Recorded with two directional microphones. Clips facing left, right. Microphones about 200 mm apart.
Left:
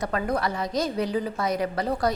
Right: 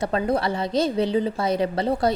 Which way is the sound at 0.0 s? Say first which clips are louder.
Right 4 dB; 25° right (ahead or behind).